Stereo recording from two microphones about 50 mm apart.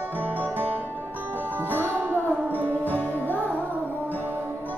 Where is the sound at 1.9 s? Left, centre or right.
Right.